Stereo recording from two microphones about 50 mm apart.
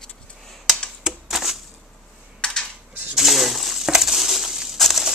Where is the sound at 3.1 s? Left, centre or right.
Centre.